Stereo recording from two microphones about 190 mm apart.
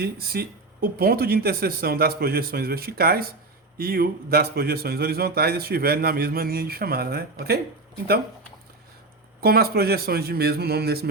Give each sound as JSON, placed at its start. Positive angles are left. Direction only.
{"t": 0.0, "sound": "a man's voice", "side_deg": -55}
{"t": 9.4, "sound": "a man's voice", "side_deg": -55}